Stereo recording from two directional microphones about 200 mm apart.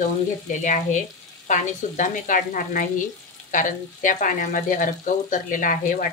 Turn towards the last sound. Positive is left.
turn(degrees=40)  # may be behind; listen again after turning